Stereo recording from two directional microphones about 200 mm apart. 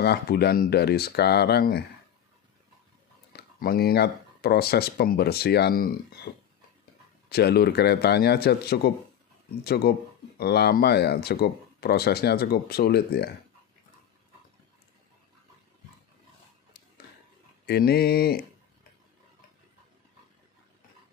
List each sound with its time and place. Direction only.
0.0 s speech: 55° left (ahead or behind)
3.3 s speech: 50° left (ahead or behind)
17.6 s speech: 50° left (ahead or behind)